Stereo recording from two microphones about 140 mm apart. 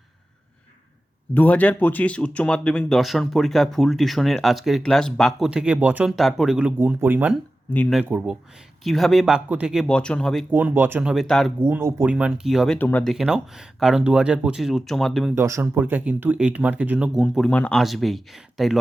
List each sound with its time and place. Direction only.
1.3 s speech: 10° left (ahead or behind)
5.5 s speech: 5° right (ahead or behind)
8.8 s speech: centre (ahead or behind)
9.8 s speech: 5° left (ahead or behind)
10.5 s speech: 15° right (ahead or behind)
11.1 s speech: centre (ahead or behind)
11.6 s speech: 15° right (ahead or behind)
12.1 s speech: 5° right (ahead or behind); by 13.1 s 10° left (ahead or behind)
13.1 s speech: 5° right (ahead or behind)
15.4 s speech: 20° right (ahead or behind); by 18.8 s centre (ahead or behind)